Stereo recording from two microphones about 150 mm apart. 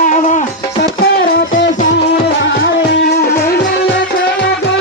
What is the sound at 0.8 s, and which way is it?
Music, 90° left.